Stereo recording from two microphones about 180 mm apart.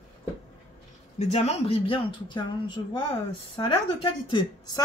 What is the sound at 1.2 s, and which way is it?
Speech, 40° left (ahead or behind).